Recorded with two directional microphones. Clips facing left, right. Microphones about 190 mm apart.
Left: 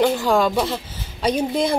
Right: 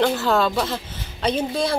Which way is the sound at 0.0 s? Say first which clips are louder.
Left 2 dB; 10° left (ahead or behind).